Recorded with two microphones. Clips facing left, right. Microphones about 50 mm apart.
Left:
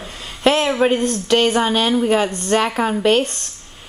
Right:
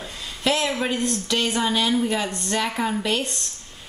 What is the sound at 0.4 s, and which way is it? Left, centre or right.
A woman's voice, left.